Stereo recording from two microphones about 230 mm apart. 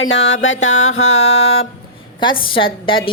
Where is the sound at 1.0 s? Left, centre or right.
Left.